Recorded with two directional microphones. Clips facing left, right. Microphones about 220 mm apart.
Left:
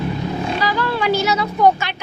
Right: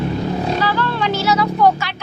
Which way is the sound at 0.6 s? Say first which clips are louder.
Left 1 dB; 10° left (ahead or behind).